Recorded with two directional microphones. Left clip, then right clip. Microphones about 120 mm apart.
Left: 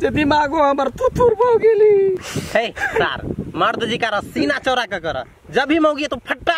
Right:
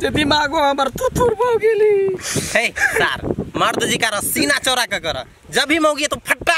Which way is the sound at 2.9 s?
20° right (ahead or behind).